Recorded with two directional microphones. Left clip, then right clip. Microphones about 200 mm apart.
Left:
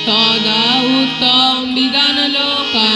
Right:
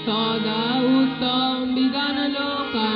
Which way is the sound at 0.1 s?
55° left (ahead or behind).